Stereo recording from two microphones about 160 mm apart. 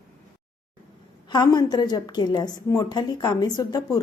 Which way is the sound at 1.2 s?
25° left (ahead or behind).